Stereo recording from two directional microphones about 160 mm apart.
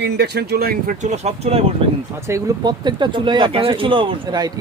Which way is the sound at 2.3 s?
25° right (ahead or behind).